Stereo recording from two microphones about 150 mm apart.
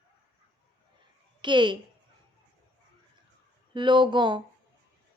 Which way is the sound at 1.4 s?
30° right (ahead or behind).